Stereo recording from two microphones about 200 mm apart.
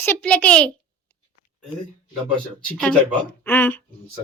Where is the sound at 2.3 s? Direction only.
5° left (ahead or behind).